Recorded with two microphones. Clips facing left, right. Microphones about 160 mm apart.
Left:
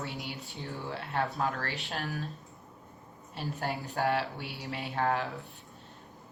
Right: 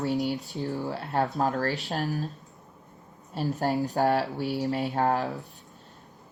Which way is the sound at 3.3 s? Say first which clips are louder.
Right 8 dB; 40° right (ahead or behind).